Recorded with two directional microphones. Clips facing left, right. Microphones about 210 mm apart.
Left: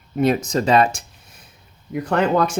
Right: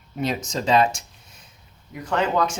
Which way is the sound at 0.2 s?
55° left (ahead or behind).